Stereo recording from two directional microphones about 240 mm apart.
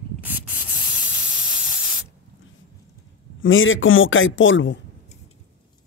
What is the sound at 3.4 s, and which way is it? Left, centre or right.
A man's voice, left.